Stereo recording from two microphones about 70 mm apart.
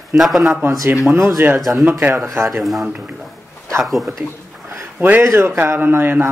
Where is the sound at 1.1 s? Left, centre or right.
Right.